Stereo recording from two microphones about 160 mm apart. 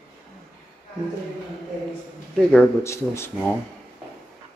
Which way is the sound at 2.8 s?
15° left (ahead or behind).